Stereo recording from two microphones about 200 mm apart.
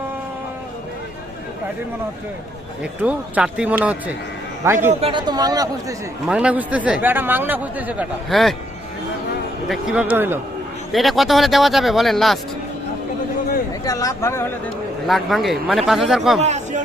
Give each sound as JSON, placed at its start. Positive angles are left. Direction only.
{"t": 3.0, "sound": "speech", "side_deg": -5}
{"t": 4.9, "sound": "a man's voice", "side_deg": -25}
{"t": 6.2, "sound": "speech", "side_deg": -5}
{"t": 9.6, "sound": "speech", "side_deg": -5}
{"t": 10.9, "sound": "speech", "side_deg": 0}
{"t": 13.8, "sound": "speech", "side_deg": 15}
{"t": 15.0, "sound": "speech", "side_deg": 0}
{"t": 16.4, "sound": "chatter", "side_deg": -35}